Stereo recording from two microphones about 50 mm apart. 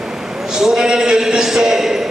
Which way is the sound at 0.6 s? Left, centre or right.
Centre.